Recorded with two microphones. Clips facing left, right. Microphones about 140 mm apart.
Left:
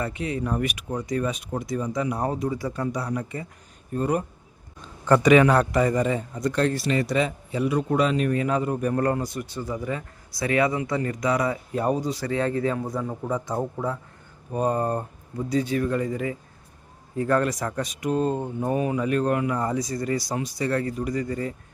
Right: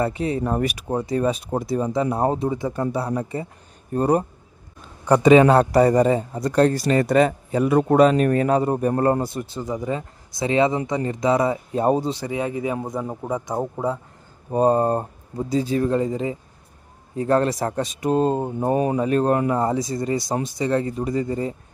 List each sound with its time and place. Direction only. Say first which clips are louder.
0.0 s speech: right 5 dB; 35° right (ahead or behind)
4.8 s a sound: right 1 dB; 15° right (ahead or behind)
5.2 s speech: right 5 dB; 30° right (ahead or behind)
12.2 s speech: even; 15° right (ahead or behind)